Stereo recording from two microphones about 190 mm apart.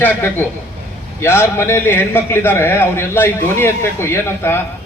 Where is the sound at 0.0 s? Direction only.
10° left (ahead or behind).